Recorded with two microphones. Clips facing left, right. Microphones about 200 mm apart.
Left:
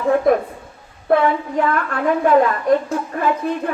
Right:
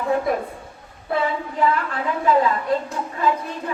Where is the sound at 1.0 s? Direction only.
60° left (ahead or behind).